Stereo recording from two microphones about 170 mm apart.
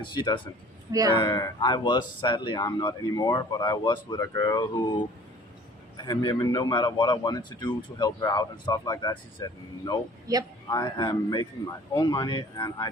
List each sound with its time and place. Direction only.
0.0 s speech: 30° left (ahead or behind)
0.9 s speech: 20° right (ahead or behind)
1.1 s speech: 30° left (ahead or behind)
6.0 s speech: 25° left (ahead or behind)
10.3 s a man's voice: 20° right (ahead or behind)
10.7 s speech: 25° left (ahead or behind)